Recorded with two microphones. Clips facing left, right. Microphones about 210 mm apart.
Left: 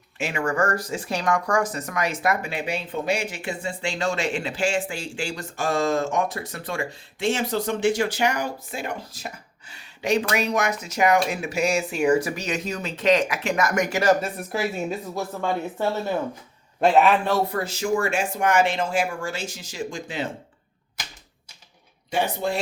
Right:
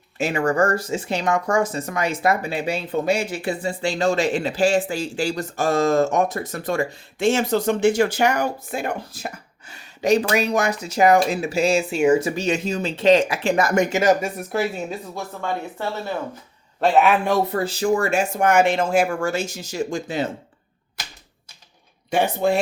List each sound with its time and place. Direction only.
0.2 s speech: 35° right (ahead or behind); by 14.3 s 15° right (ahead or behind)
14.5 s speech: 5° left (ahead or behind)
16.8 s a man's voice: centre (ahead or behind)
17.5 s speech: 30° right (ahead or behind)
22.1 s speech: 55° right (ahead or behind)